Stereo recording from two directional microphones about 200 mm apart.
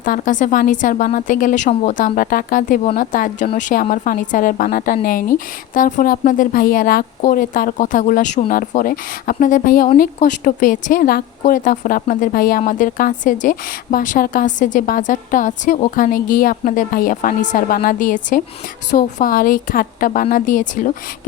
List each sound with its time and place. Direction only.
0.0 s a woman's voice: 40° left (ahead or behind)